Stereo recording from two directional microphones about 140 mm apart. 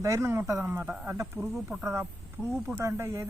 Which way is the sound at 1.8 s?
20° right (ahead or behind).